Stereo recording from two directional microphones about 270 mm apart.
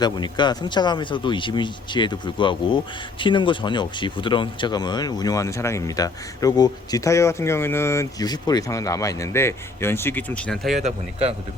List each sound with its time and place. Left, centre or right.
0.0 s speech: centre
10.8 s speech: right